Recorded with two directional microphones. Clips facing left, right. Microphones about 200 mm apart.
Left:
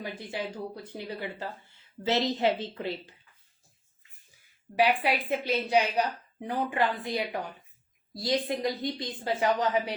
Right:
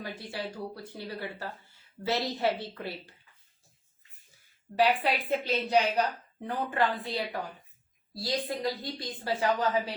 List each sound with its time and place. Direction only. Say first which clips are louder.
0.0 s a woman's voice: left 2 dB; 20° left (ahead or behind)
4.8 s a woman's voice: left 1 dB; 10° left (ahead or behind)